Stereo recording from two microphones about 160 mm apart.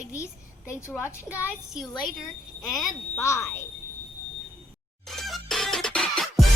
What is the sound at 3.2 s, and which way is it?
Speech, 15° left (ahead or behind).